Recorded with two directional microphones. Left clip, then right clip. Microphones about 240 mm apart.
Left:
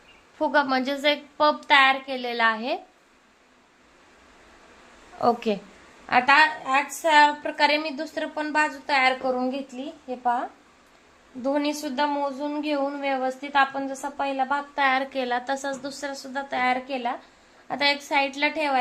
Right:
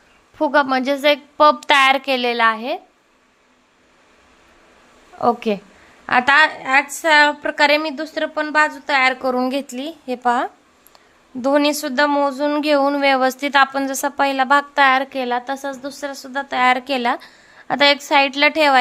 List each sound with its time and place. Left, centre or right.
0.3 s a woman's voice: right
5.1 s a woman's voice: centre
6.1 s speech: right
11.4 s speech: right